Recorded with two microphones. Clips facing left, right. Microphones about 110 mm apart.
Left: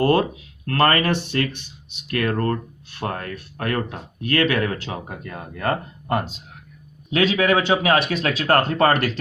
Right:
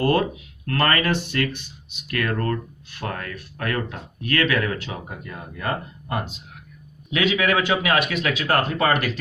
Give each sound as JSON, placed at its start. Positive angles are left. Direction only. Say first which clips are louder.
{"t": 0.0, "sound": "speech", "louder": "left 2 dB", "side_deg": 30}
{"t": 5.0, "sound": "speech", "louder": "left 2 dB", "side_deg": 45}